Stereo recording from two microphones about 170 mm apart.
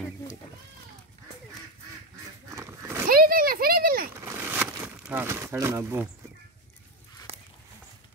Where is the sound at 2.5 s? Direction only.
15° right (ahead or behind).